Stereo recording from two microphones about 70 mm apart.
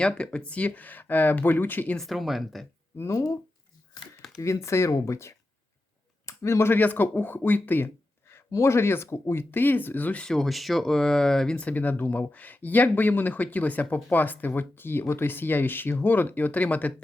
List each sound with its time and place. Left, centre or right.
0.0 s speech: centre
2.0 s speech: centre
3.0 s speech: left
4.4 s speech: left
8.4 s speech: left
10.2 s speech: centre; by 16.9 s left